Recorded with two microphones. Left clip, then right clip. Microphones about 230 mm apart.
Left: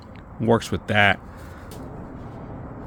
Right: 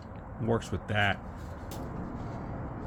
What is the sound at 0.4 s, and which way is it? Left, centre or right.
Speech, left.